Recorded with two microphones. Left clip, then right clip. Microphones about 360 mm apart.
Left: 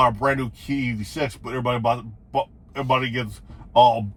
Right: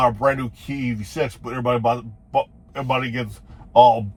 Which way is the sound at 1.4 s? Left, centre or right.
Centre.